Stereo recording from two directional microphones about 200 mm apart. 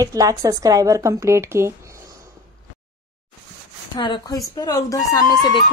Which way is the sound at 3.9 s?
25° left (ahead or behind).